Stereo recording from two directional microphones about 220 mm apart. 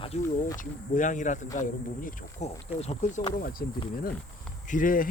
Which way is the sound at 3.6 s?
45° left (ahead or behind).